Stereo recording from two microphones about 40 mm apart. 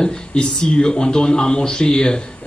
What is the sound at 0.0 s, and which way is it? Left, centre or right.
A man's voice, left.